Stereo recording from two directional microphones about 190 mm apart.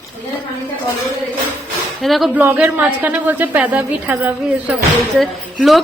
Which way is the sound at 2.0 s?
Centre (ahead or behind).